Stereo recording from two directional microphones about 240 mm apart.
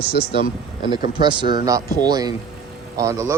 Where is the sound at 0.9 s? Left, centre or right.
Centre.